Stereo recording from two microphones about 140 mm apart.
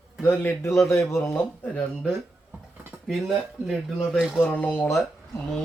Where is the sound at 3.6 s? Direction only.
Centre (ahead or behind).